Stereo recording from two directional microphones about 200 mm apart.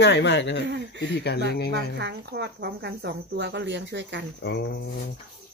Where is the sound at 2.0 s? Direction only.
60° right (ahead or behind).